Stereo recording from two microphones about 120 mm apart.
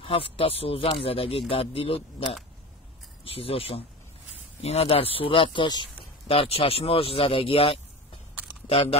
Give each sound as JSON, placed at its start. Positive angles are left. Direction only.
{"t": 0.0, "sound": "speech", "side_deg": 50}
{"t": 6.2, "sound": "speech", "side_deg": 55}